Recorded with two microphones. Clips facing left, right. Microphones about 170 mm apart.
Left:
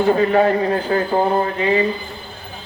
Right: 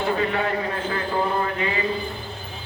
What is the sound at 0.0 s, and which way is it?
A man's voice, 40° left (ahead or behind).